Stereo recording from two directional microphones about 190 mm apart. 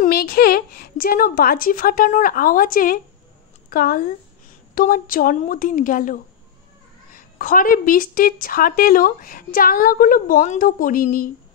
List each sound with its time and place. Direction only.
0.0 s a woman's voice: 55° left (ahead or behind)